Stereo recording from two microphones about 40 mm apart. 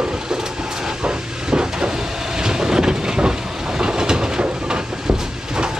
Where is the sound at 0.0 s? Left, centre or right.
Centre.